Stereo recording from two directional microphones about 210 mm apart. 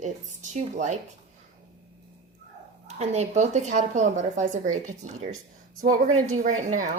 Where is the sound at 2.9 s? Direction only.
30° right (ahead or behind).